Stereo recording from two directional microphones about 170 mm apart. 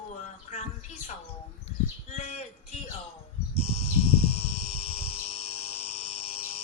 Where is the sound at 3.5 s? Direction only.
35° left (ahead or behind).